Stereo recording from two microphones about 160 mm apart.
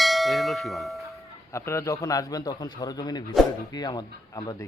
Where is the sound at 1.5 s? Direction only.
20° left (ahead or behind).